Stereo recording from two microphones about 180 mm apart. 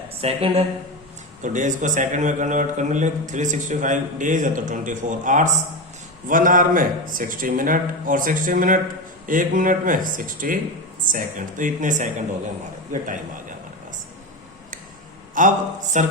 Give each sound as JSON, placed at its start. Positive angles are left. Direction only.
{"t": 0.2, "sound": "speech", "side_deg": -35}
{"t": 1.4, "sound": "a man's voice", "side_deg": -45}
{"t": 15.4, "sound": "a man's voice", "side_deg": -45}